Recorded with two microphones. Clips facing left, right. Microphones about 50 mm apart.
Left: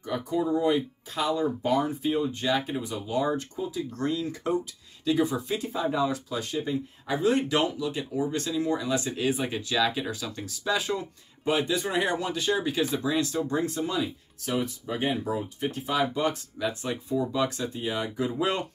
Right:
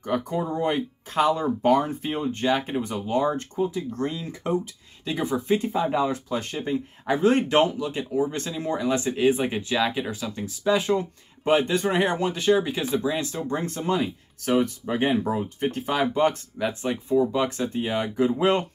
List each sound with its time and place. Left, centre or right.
0.0 s speech: right